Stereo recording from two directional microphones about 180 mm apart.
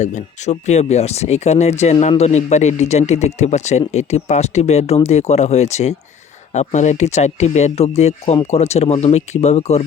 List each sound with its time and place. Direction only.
0.0 s speech: 40° left (ahead or behind)